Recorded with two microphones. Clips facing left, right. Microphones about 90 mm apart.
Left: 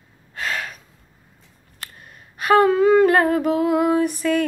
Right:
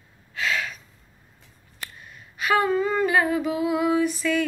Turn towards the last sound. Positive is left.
turn(degrees=50)  # may be behind; listen again after turning